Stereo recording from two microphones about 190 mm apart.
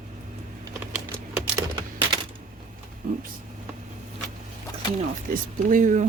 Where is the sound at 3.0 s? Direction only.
50° right (ahead or behind).